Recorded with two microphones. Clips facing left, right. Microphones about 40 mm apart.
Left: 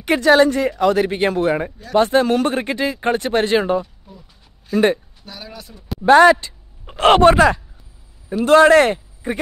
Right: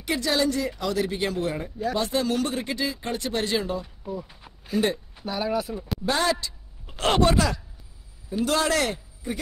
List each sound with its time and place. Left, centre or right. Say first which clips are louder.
0.0 s speech: left 11 dB; left
5.2 s speech: right 10 dB; centre
6.0 s speech: left 15 dB; left